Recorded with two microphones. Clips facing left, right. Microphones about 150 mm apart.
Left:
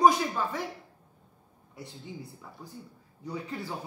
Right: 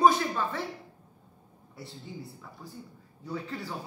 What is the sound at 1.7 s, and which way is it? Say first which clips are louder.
Speech: even; 20° left (ahead or behind).